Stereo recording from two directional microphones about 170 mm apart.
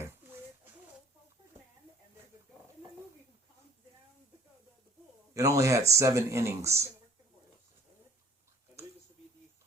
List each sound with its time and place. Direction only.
5.3 s speech: 20° right (ahead or behind)